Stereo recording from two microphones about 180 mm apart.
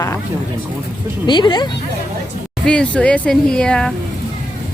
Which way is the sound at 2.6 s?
5° left (ahead or behind).